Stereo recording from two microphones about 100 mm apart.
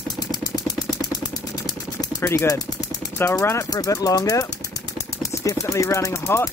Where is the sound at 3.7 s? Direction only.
35° left (ahead or behind).